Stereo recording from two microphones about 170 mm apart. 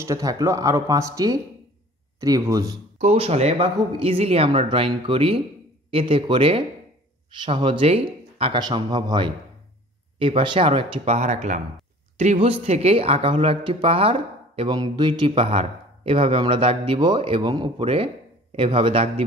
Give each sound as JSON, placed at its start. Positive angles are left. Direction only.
{"t": 0.0, "sound": "speech", "side_deg": -20}
{"t": 3.0, "sound": "speech", "side_deg": -40}
{"t": 11.1, "sound": "speech", "side_deg": -45}